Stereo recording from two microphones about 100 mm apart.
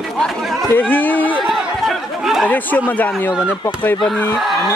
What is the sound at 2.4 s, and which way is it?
Speech, 15° left (ahead or behind).